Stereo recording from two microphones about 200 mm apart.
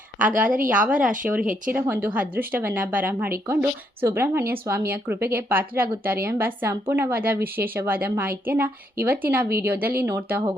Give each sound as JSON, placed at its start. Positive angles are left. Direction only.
{"t": 0.2, "sound": "speech", "side_deg": -5}
{"t": 0.4, "sound": "a woman's voice", "side_deg": -45}
{"t": 0.9, "sound": "speech", "side_deg": -5}